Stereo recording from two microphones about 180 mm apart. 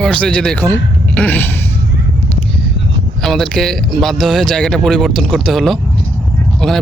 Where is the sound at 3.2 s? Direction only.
Centre (ahead or behind).